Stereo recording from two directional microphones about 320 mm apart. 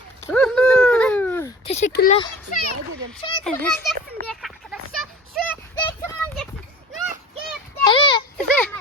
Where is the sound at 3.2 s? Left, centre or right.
Centre.